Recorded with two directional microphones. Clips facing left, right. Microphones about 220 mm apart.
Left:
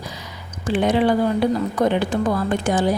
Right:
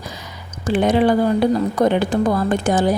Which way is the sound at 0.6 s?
45° right (ahead or behind).